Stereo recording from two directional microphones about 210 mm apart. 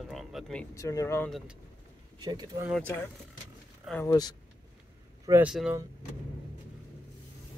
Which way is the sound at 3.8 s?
5° left (ahead or behind).